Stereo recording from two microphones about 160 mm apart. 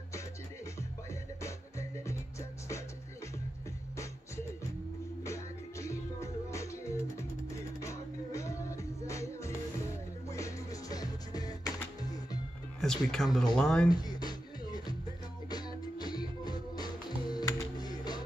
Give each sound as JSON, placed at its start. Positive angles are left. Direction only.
{"t": 1.4, "sound": "music", "side_deg": 20}
{"t": 5.2, "sound": "music", "side_deg": 20}
{"t": 12.8, "sound": "speech", "side_deg": 5}
{"t": 13.8, "sound": "music", "side_deg": 25}